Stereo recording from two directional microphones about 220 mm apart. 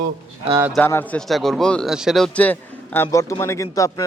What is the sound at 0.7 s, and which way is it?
A man's voice, 10° left (ahead or behind).